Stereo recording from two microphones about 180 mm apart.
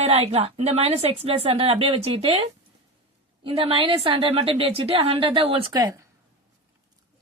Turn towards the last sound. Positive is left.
turn(degrees=-20)  # may be behind; listen again after turning